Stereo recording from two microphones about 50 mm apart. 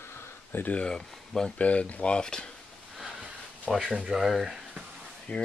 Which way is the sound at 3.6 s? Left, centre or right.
Centre.